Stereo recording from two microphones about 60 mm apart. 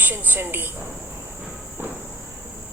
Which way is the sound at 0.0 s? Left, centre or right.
Right.